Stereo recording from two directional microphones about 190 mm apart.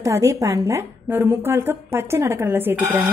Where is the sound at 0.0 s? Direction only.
15° right (ahead or behind).